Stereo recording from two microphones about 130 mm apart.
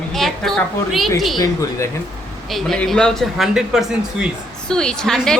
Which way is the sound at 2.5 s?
Centre (ahead or behind).